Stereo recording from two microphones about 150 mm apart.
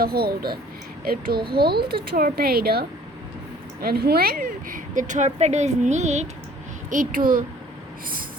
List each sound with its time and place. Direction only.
0.0 s speech: 90° right
1.0 s a child's voice: 75° right (ahead or behind)
1.5 s a woman's voice: 90° right; by 6.2 s 50° right (ahead or behind)
6.9 s a child's voice: 65° right (ahead or behind)